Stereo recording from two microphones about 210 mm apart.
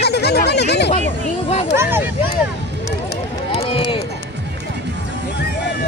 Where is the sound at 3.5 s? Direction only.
30° left (ahead or behind).